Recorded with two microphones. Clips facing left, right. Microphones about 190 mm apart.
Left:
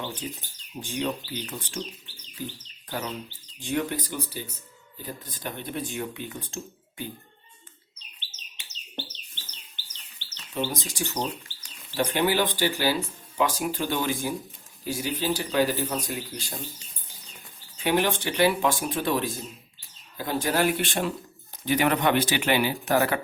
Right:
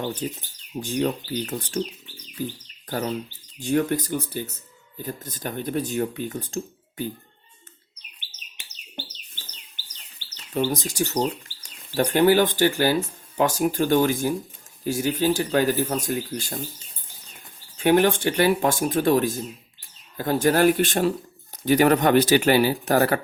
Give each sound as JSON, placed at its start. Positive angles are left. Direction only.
{"t": 0.0, "sound": "speech", "side_deg": -40}
{"t": 3.6, "sound": "speech", "side_deg": -45}
{"t": 9.5, "sound": "bird", "side_deg": -10}
{"t": 10.5, "sound": "speech", "side_deg": -40}
{"t": 17.7, "sound": "speech", "side_deg": -50}